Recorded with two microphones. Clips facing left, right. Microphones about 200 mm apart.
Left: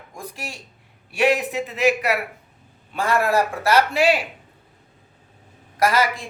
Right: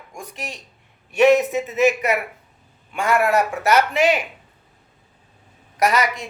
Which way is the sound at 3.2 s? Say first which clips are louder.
Right 1 dB; 30° left (ahead or behind).